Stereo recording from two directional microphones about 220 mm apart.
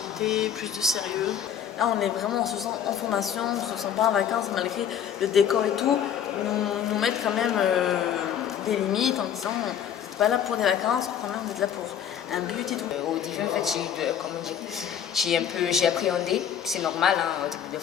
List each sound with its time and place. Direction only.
0.2 s a woman's voice: centre (ahead or behind)
13.5 s a woman's voice: centre (ahead or behind)